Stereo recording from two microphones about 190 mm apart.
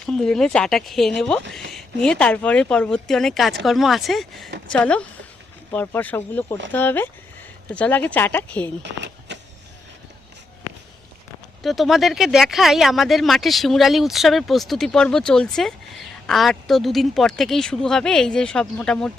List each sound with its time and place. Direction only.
0.0 s speech: 5° left (ahead or behind)
8.8 s a sound: 65° right (ahead or behind)
11.6 s speech: centre (ahead or behind)